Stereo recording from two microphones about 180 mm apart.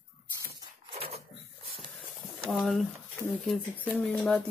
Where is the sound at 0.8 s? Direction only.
35° right (ahead or behind).